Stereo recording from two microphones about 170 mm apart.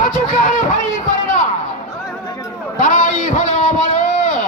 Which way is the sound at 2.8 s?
45° left (ahead or behind).